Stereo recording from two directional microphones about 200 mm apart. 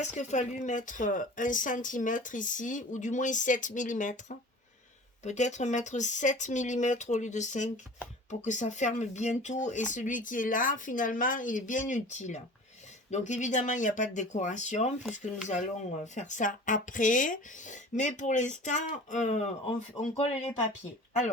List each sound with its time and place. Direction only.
0.0 s speech: 35° left (ahead or behind)